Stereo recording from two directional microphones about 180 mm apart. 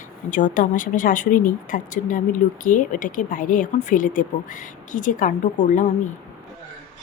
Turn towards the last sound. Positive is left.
turn(degrees=45)  # may be behind; listen again after turning